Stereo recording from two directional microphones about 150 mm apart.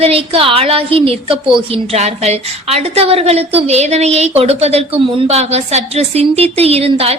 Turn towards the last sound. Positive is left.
turn(degrees=-40)  # may be behind; listen again after turning